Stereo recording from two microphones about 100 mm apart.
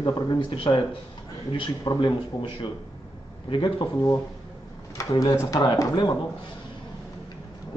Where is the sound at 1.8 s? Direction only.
50° left (ahead or behind).